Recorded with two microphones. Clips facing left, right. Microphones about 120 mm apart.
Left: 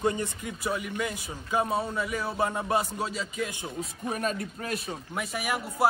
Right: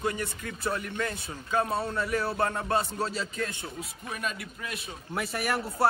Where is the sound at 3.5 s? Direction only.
20° left (ahead or behind).